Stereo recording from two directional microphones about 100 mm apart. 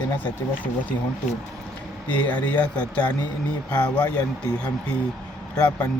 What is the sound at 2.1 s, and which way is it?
Speech, 15° left (ahead or behind).